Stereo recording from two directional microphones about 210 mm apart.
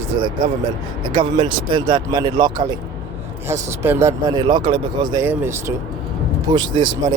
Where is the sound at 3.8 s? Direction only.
10° right (ahead or behind).